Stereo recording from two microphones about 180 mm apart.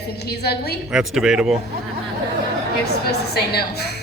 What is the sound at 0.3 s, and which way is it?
Speech, 65° left (ahead or behind).